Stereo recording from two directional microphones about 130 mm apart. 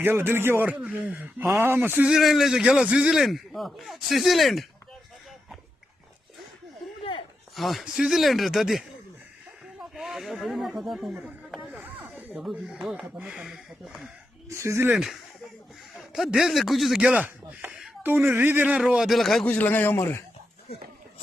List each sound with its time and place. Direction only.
0.0 s speech: 15° right (ahead or behind); by 4.6 s centre (ahead or behind)
7.5 s speech: centre (ahead or behind)
9.9 s speech: centre (ahead or behind)
11.8 s snake: 15° right (ahead or behind)
12.5 s speech: 5° right (ahead or behind)
14.5 s speech: 20° right (ahead or behind)
14.9 s speech: centre (ahead or behind)
19.5 s a man's voice: 15° left (ahead or behind)